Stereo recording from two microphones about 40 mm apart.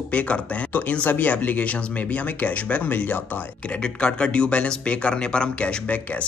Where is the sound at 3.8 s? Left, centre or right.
Left.